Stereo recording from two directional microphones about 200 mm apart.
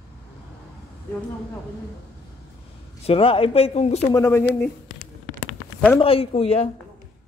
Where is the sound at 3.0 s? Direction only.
30° left (ahead or behind).